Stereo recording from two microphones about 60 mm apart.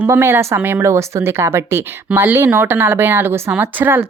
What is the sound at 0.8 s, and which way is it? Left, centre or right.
Speech, right.